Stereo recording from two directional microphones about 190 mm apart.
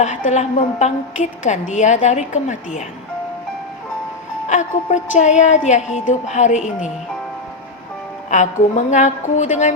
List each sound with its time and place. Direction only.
0.0 s a woman's voice: 40° left (ahead or behind)
4.4 s a woman's voice: 40° left (ahead or behind)
8.3 s a woman's voice: 40° left (ahead or behind)